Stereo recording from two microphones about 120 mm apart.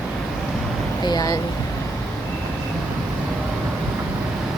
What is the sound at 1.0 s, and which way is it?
Speech, 35° left (ahead or behind).